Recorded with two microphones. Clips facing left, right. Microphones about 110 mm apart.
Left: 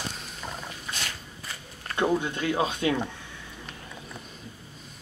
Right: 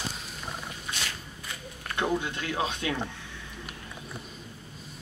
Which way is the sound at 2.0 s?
15° left (ahead or behind).